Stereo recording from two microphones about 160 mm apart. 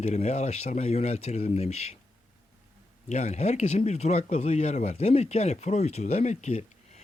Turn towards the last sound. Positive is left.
turn(degrees=45)  # may be behind; listen again after turning